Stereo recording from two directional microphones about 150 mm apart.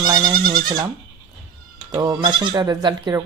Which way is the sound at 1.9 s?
25° right (ahead or behind).